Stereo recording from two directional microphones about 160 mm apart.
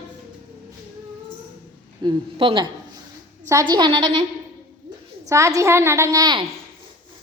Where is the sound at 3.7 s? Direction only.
25° right (ahead or behind).